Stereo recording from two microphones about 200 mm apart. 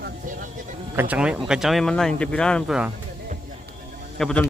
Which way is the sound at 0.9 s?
10° right (ahead or behind).